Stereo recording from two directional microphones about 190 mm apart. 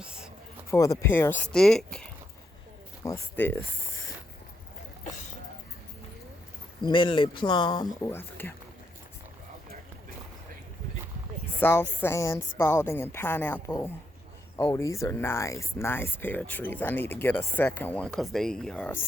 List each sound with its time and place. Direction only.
0.0 s a sound: 5° right (ahead or behind)
0.7 s speech: 15° left (ahead or behind)
6.8 s speech: 25° left (ahead or behind)
11.6 s speech: 10° left (ahead or behind)